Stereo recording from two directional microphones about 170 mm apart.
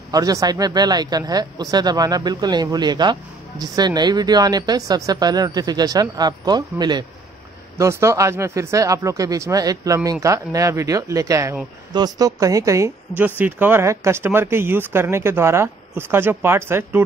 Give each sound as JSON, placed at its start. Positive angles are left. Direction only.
{"t": 0.1, "sound": "a woman's voice", "side_deg": -20}